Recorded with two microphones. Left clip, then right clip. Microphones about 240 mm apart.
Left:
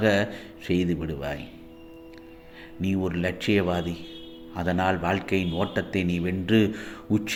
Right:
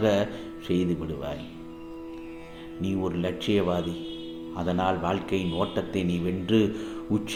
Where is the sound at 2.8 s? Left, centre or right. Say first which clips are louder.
Left 1 dB; left.